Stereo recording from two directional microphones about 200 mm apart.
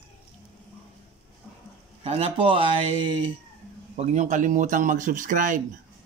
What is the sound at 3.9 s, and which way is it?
Speech, 35° right (ahead or behind).